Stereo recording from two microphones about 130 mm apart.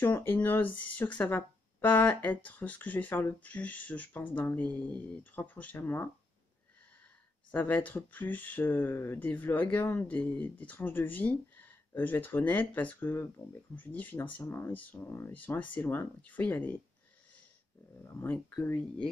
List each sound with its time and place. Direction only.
0.0 s speech: 15° left (ahead or behind)
7.5 s speech: 15° left (ahead or behind)
18.0 s speech: 15° left (ahead or behind)